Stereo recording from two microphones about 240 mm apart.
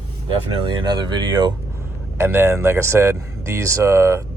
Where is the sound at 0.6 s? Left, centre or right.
Centre.